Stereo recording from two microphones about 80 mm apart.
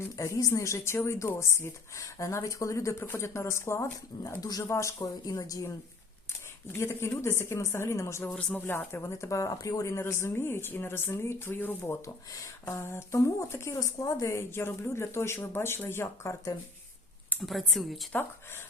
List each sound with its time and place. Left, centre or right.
0.2 s speech: left
4.4 s speech: left
4.7 s speech: left
5.2 s speech: left
6.7 s speech: left
8.2 s speech: centre
8.5 s speech: left
11.8 s speech: left
12.7 s speech: left
17.4 s speech: centre